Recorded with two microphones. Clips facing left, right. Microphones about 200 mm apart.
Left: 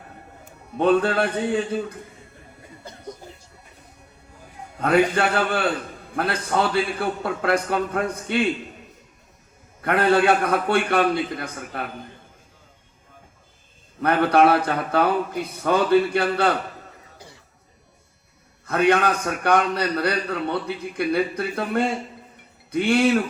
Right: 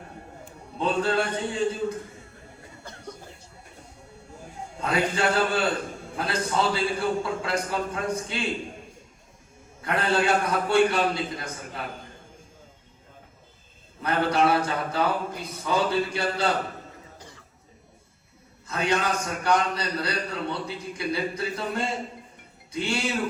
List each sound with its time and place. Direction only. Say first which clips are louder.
0.8 s a man's voice: left 6 dB; 60° left (ahead or behind)
4.8 s a man's voice: left 6 dB; 60° left (ahead or behind)
9.8 s a man's voice: left 6 dB; 55° left (ahead or behind)
14.0 s a man's voice: left 6 dB; 60° left (ahead or behind)
18.6 s a man's voice: left 7 dB; 60° left (ahead or behind)